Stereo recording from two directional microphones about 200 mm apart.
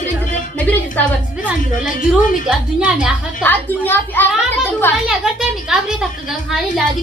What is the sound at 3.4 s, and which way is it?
Speech, 10° left (ahead or behind).